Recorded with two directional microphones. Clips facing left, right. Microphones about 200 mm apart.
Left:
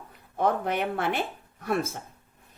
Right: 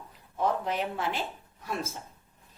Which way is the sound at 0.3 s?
60° left (ahead or behind).